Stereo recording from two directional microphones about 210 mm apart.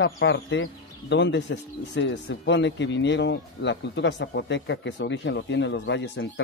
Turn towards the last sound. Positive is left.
turn(degrees=60)  # may be behind; listen again after turning